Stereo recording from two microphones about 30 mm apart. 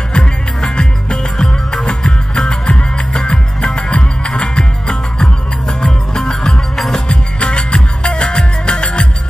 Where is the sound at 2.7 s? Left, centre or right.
Left; by 7.0 s centre.